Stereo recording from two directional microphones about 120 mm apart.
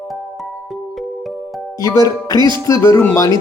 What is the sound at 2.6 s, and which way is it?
Speech, 25° left (ahead or behind).